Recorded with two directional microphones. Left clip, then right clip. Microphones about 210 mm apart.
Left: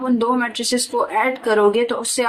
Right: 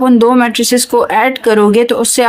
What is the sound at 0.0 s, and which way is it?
Speech, 50° right (ahead or behind).